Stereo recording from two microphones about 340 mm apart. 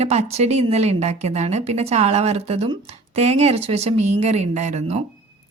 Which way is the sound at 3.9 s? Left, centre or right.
Right.